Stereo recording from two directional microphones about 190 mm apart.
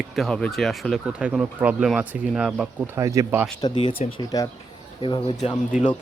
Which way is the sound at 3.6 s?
30° left (ahead or behind).